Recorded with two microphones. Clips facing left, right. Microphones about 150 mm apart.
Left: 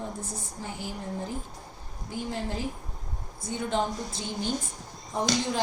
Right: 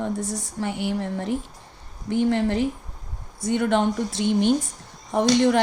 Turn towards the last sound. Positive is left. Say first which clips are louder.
# right 10 dB
turn(degrees=-70)  # may be behind; listen again after turning